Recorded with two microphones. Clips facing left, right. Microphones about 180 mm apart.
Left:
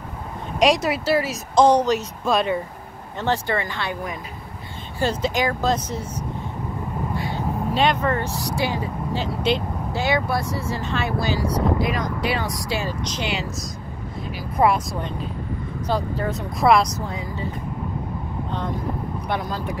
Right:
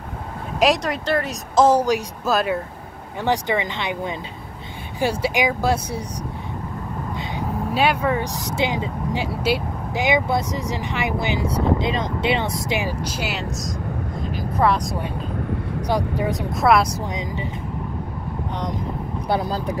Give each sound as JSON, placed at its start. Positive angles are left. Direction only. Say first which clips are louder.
{"t": 0.6, "sound": "speech", "louder": "left 1 dB", "side_deg": 0}
{"t": 3.2, "sound": "speech", "louder": "right 2 dB", "side_deg": -15}
{"t": 7.2, "sound": "vehicle", "louder": "left 1 dB", "side_deg": -20}
{"t": 7.7, "sound": "speech", "louder": "right 1 dB", "side_deg": -5}
{"t": 9.3, "sound": "speech", "louder": "left 1 dB", "side_deg": -5}
{"t": 9.9, "sound": "speech", "louder": "right 3 dB", "side_deg": -15}
{"t": 13.0, "sound": "speech", "louder": "even", "side_deg": -5}
{"t": 14.6, "sound": "speech", "louder": "left 1 dB", "side_deg": 15}
{"t": 15.9, "sound": "speech", "louder": "right 2 dB", "side_deg": -15}
{"t": 16.5, "sound": "speech", "louder": "left 1 dB", "side_deg": 0}
{"t": 19.2, "sound": "speech", "louder": "right 5 dB", "side_deg": -35}